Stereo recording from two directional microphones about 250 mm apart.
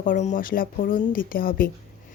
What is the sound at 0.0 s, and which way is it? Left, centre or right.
Speech, left.